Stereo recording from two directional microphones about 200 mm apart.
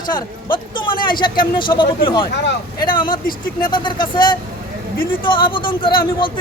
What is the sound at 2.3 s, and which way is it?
Speech, 60° left (ahead or behind).